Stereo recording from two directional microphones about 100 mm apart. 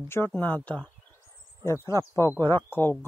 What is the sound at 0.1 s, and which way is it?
Speech, 20° left (ahead or behind).